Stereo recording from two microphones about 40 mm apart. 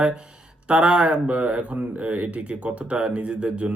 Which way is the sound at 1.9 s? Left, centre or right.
Right.